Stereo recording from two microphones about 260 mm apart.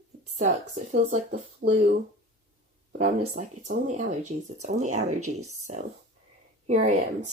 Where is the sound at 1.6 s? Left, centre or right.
Right.